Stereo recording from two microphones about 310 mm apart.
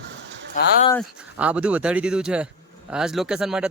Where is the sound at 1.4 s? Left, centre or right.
Centre.